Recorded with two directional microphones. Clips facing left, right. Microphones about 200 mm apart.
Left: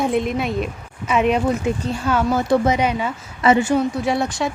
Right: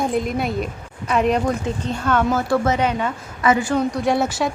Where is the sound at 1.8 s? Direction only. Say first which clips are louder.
Right 3 dB; 10° left (ahead or behind).